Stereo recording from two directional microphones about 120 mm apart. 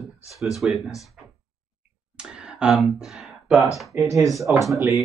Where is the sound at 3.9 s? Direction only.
15° right (ahead or behind).